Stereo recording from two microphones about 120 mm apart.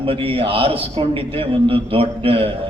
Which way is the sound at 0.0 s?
50° right (ahead or behind).